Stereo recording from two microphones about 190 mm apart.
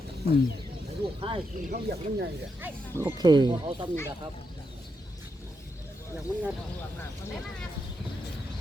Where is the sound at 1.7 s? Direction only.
60° right (ahead or behind).